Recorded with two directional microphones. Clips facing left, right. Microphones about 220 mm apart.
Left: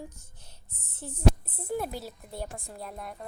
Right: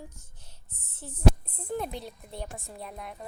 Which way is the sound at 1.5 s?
5° left (ahead or behind).